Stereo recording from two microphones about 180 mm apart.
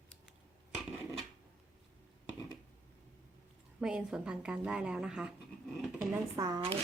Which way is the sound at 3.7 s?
5° right (ahead or behind).